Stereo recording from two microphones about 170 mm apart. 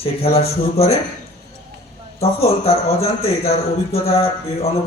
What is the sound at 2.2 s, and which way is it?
Speech, 35° left (ahead or behind).